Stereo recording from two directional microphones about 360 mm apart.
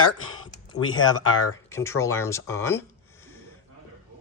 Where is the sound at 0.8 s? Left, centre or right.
Left.